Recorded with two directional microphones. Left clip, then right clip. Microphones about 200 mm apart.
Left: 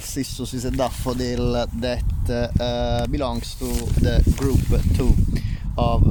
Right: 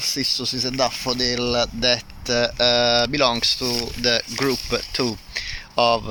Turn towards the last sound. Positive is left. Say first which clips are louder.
# right 6 dB
turn(degrees=10)  # may be behind; listen again after turning